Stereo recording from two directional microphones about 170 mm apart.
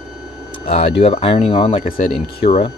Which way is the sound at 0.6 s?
35° left (ahead or behind).